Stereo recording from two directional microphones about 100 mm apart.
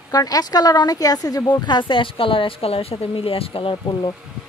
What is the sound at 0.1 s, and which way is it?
A woman's voice, 40° left (ahead or behind).